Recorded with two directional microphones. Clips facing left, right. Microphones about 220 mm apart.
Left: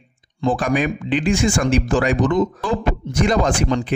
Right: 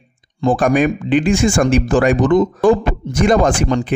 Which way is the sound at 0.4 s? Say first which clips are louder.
Right 5 dB; 50° right (ahead or behind).